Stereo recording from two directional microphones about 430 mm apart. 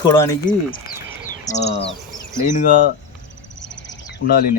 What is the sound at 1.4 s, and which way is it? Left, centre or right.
Speech, centre.